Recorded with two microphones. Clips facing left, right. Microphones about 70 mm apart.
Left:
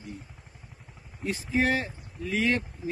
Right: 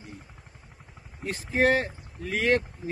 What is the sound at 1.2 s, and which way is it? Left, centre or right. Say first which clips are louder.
Speech: right 3 dB; right.